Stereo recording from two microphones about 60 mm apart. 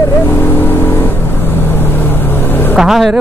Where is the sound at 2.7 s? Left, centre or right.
Centre.